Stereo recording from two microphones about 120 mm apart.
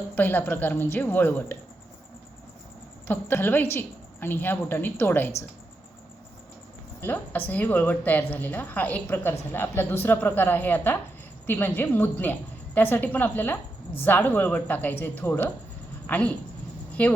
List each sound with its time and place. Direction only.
0.2 s a woman's voice: 15° left (ahead or behind)
3.1 s a woman's voice: 15° left (ahead or behind)
7.0 s a woman's voice: 15° left (ahead or behind)